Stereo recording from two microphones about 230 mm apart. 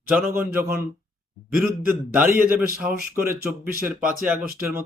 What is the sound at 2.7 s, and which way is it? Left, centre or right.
Speech, right.